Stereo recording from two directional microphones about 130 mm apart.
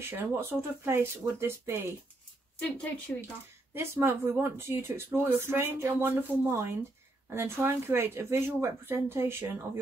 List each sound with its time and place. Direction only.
0.0 s speech: 20° right (ahead or behind)
3.1 s speech: 10° left (ahead or behind)
3.7 s speech: 20° right (ahead or behind)